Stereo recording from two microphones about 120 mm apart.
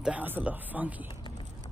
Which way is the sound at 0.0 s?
15° right (ahead or behind).